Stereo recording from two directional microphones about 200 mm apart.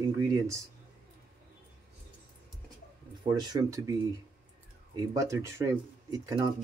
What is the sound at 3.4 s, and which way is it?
Speech, 20° right (ahead or behind).